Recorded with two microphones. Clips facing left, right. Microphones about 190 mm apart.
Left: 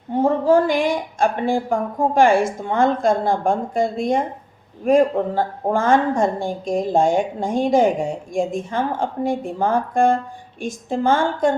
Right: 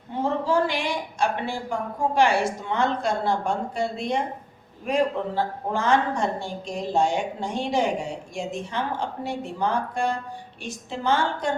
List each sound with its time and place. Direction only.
0.1 s a woman's voice: 50° left (ahead or behind)